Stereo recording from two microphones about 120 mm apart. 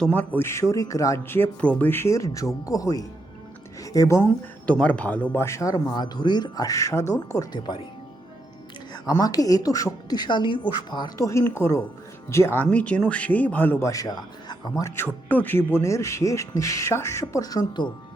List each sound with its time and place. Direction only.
0.0 s speech: 15° left (ahead or behind); by 4.2 s 30° left (ahead or behind)
4.2 s speech: 10° left (ahead or behind); by 7.6 s 30° left (ahead or behind)
9.0 s a woman's voice: 30° left (ahead or behind)
11.3 s speech: 20° left (ahead or behind)